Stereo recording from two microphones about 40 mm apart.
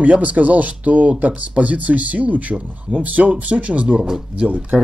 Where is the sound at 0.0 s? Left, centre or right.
Right.